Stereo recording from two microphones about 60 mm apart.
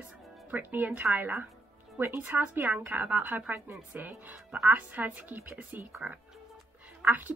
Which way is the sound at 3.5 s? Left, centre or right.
Right.